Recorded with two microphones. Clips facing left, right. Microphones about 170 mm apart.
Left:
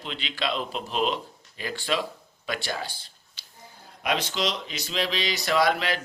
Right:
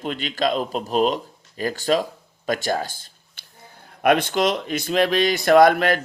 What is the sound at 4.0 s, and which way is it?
Speech, 55° right (ahead or behind).